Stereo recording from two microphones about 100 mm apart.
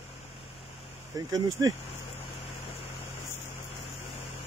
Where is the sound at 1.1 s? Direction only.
40° right (ahead or behind).